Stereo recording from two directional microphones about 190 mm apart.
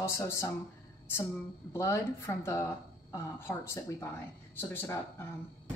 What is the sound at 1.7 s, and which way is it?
Speech, 15° left (ahead or behind).